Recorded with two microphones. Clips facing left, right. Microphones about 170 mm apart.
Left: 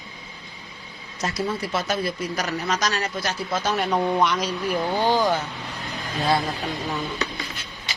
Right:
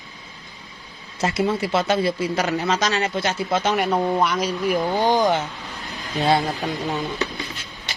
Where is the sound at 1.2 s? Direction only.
25° right (ahead or behind).